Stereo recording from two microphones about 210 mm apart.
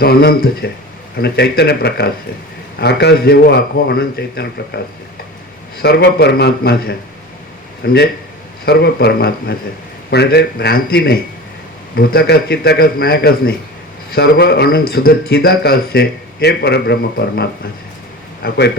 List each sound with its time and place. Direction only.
0.0 s a man's voice: 50° left (ahead or behind)